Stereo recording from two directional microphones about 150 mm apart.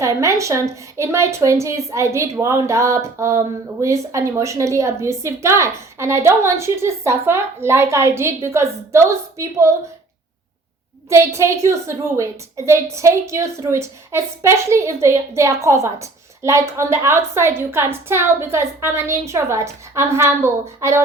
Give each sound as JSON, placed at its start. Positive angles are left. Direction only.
{"t": 0.0, "sound": "a woman's voice", "side_deg": -20}
{"t": 11.1, "sound": "a woman's voice", "side_deg": -20}